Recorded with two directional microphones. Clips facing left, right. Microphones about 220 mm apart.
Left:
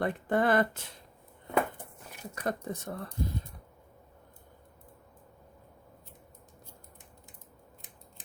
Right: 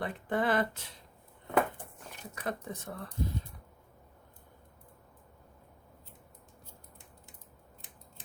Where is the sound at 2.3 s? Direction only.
45° left (ahead or behind).